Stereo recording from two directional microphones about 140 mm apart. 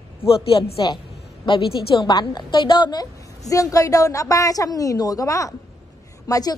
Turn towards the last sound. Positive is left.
turn(degrees=25)  # may be behind; listen again after turning